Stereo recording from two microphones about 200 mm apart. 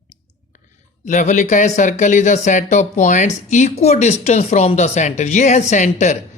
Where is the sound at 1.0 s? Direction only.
35° left (ahead or behind).